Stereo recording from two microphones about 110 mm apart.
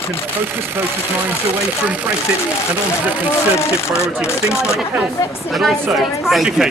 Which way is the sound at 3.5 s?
25° left (ahead or behind).